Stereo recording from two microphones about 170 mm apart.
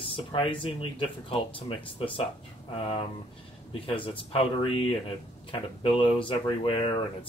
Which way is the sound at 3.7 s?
30° left (ahead or behind).